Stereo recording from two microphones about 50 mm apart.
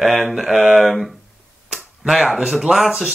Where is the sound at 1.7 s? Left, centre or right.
Centre.